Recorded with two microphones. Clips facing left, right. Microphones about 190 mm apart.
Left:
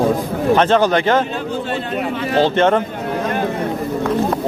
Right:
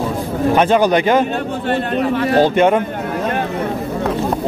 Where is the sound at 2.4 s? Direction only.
10° right (ahead or behind).